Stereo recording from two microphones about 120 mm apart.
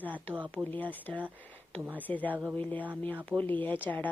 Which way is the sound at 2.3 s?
10° right (ahead or behind).